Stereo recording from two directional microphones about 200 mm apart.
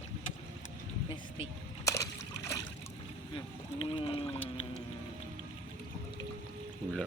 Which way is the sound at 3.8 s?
25° left (ahead or behind).